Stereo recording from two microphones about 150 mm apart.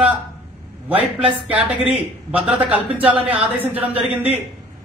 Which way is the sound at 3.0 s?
10° right (ahead or behind).